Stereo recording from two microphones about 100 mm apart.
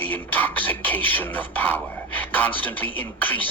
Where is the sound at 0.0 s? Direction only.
20° left (ahead or behind).